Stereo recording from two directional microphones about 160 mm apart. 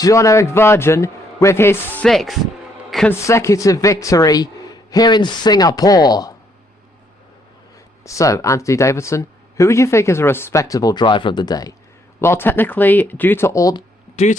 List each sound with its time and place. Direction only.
0.0 s a man's voice: 20° left (ahead or behind)
2.0 s speech: centre (ahead or behind)
3.1 s speech: 15° left (ahead or behind)
8.0 s speech: 20° left (ahead or behind)
12.2 s a man's voice: 15° left (ahead or behind)
14.2 s speech: 45° left (ahead or behind)